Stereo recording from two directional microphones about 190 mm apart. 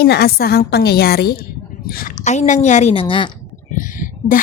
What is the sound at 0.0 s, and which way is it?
A woman's voice, 55° left (ahead or behind).